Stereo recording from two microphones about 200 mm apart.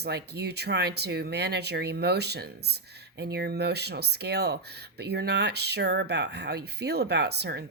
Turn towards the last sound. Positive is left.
turn(degrees=-55)  # may be behind; listen again after turning